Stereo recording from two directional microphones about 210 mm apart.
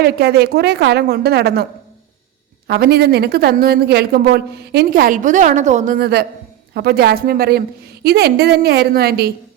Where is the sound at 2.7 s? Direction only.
50° right (ahead or behind).